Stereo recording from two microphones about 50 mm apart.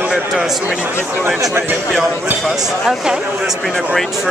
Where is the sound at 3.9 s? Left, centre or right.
Centre.